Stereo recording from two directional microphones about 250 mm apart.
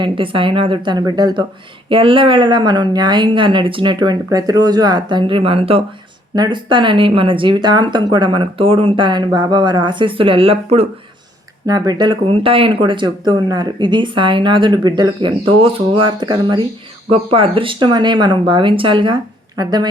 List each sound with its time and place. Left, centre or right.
0.0 s a woman's voice: right